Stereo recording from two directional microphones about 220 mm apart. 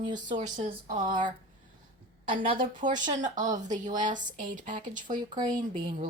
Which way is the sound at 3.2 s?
35° right (ahead or behind).